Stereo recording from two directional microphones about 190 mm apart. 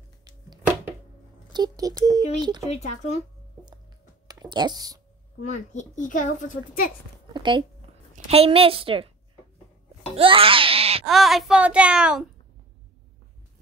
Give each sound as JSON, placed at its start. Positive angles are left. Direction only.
{"t": 1.5, "sound": "a woman's voice", "side_deg": -20}
{"t": 2.6, "sound": "speech", "side_deg": 35}
{"t": 3.2, "sound": "a sound", "side_deg": -25}
{"t": 4.3, "sound": "speech", "side_deg": -20}
{"t": 5.4, "sound": "a child's voice", "side_deg": 40}
{"t": 7.3, "sound": "a woman's voice", "side_deg": -25}
{"t": 10.1, "sound": "babbling", "side_deg": -30}
{"t": 11.1, "sound": "a child's voice", "side_deg": 0}